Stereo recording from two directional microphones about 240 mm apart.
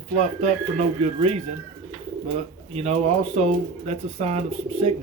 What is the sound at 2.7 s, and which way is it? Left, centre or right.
Speech, right.